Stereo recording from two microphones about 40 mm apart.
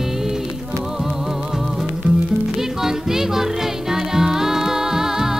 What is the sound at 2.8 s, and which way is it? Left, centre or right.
Music, centre.